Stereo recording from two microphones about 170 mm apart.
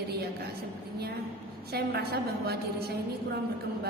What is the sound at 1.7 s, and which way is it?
A woman's voice, 65° right (ahead or behind).